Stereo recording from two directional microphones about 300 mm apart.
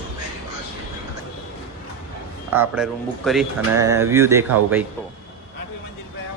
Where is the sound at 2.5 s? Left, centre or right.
Centre.